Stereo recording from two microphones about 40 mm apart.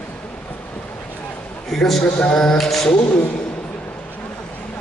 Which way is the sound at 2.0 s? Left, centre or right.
Left.